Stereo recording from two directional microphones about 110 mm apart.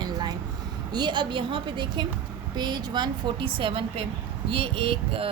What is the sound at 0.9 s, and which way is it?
Speech, 45° right (ahead or behind).